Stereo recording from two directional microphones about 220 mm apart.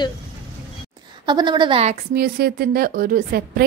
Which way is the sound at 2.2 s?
45° right (ahead or behind).